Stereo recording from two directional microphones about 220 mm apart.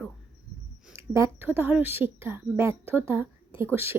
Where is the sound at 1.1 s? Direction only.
10° right (ahead or behind).